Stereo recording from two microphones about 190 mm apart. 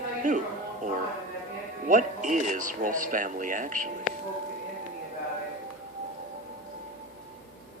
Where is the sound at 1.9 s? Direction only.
40° right (ahead or behind).